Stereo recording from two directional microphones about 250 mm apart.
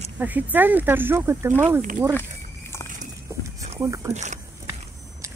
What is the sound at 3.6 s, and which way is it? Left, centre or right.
Speech, centre.